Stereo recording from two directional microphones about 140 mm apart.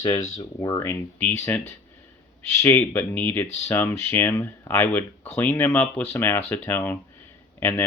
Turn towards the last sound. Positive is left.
turn(degrees=15)  # may be behind; listen again after turning